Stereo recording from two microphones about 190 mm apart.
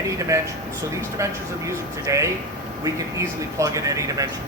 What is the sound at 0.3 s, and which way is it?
Speech, 15° right (ahead or behind).